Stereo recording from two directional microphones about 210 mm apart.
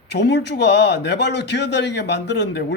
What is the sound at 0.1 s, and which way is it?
A man's voice, 55° left (ahead or behind).